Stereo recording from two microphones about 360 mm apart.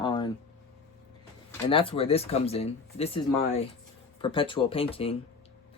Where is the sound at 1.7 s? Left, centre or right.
Centre.